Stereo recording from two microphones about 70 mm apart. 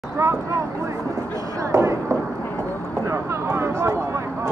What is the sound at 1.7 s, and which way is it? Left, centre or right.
Fireworks, right.